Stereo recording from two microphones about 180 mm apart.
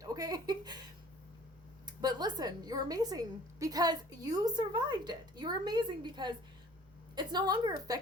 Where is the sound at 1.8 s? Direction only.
20° right (ahead or behind).